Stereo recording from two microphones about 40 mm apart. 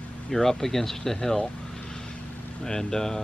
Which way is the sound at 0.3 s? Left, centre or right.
Centre.